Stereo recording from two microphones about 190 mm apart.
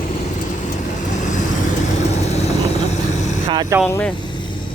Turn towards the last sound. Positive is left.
turn(degrees=-20)  # may be behind; listen again after turning